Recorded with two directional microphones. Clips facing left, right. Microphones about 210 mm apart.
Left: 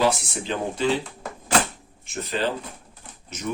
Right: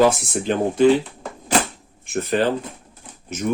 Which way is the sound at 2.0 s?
55° right (ahead or behind).